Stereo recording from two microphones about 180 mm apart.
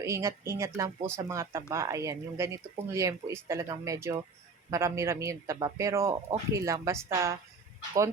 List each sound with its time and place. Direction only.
0.0 s speech: 15° right (ahead or behind)